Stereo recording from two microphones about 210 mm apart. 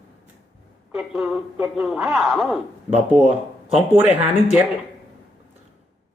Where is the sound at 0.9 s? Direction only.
5° right (ahead or behind).